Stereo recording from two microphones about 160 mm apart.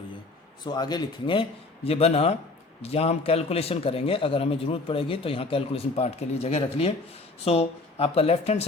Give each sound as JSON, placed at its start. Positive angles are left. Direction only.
{"t": 0.6, "sound": "a man's voice", "side_deg": 25}